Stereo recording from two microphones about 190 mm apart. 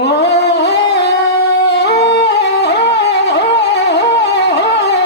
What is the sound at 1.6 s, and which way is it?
Music, 60° left (ahead or behind).